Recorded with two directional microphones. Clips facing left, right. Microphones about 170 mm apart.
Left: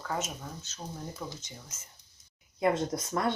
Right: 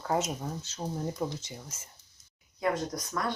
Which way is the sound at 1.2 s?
30° right (ahead or behind).